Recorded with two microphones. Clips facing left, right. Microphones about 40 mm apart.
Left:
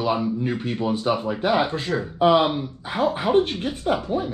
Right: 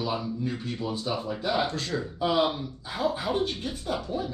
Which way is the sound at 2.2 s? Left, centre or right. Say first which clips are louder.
Left 8 dB; left.